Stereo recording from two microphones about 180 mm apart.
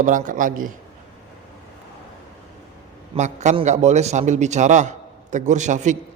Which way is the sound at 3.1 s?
40° right (ahead or behind).